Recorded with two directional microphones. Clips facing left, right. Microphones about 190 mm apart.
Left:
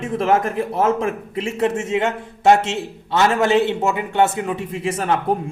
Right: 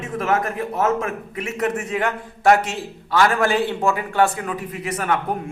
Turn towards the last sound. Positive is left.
turn(degrees=30)  # may be behind; listen again after turning